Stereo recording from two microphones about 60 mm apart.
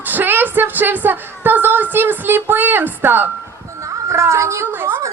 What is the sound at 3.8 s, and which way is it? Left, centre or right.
Speech, right.